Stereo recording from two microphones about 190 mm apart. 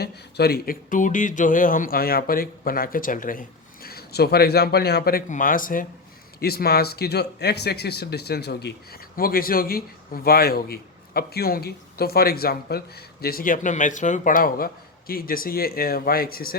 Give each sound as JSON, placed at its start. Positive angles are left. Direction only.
{"t": 0.0, "sound": "speech", "side_deg": 55}